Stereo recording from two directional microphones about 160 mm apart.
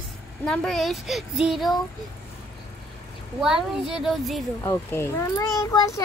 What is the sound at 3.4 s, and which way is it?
A child's voice, 5° right (ahead or behind).